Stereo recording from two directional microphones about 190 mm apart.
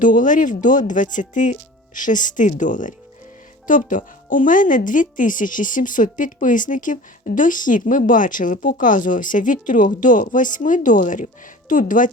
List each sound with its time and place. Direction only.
0.0 s speech: 45° left (ahead or behind)